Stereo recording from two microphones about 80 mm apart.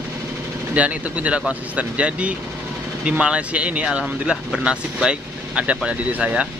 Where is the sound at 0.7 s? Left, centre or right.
Centre.